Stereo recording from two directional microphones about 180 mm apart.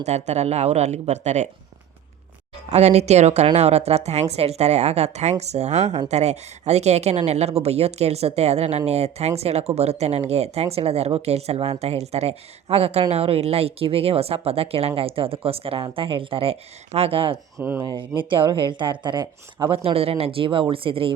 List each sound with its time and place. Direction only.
0.0 s speech: 40° right (ahead or behind)
2.6 s speech: 35° right (ahead or behind)
17.6 s speech: 10° right (ahead or behind)
17.8 s speech: 25° right (ahead or behind)
19.8 s speech: 35° right (ahead or behind)